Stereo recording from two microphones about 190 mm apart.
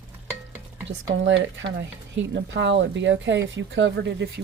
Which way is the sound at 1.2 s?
80° right.